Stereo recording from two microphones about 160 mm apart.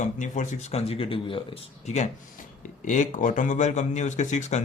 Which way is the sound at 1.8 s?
45° left (ahead or behind).